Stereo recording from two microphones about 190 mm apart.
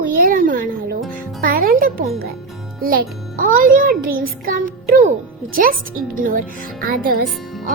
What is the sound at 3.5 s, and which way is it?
A woman's voice, 50° right (ahead or behind).